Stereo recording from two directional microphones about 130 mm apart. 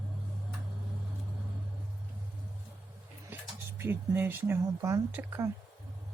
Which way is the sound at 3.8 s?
15° right (ahead or behind).